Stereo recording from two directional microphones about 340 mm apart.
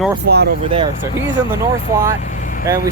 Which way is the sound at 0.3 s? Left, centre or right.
Right.